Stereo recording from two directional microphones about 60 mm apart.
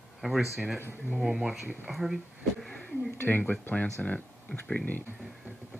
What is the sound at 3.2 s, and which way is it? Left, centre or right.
Speech, left.